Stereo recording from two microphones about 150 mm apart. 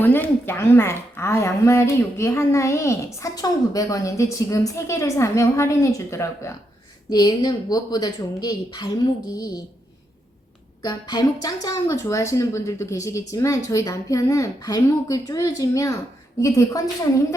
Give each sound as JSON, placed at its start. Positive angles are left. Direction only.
{"t": 0.0, "sound": "a woman's voice", "side_deg": 15}
{"t": 10.8, "sound": "a woman's voice", "side_deg": 30}